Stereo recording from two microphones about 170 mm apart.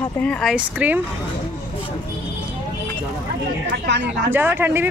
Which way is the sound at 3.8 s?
90° right.